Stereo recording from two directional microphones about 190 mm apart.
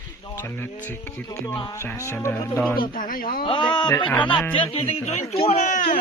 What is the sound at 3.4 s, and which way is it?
Speech, 25° left (ahead or behind).